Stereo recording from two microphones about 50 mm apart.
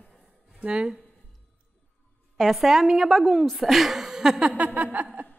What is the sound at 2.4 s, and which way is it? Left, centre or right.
A woman's voice, centre.